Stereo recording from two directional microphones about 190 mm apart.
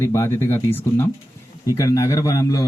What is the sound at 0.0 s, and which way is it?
A man's voice, 15° left (ahead or behind).